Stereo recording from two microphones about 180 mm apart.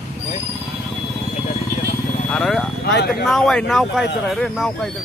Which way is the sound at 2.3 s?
5° left (ahead or behind).